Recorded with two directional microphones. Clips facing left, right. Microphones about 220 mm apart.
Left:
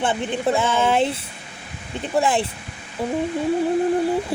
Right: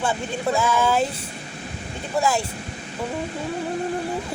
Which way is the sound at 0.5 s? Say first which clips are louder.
Even; 30° left (ahead or behind).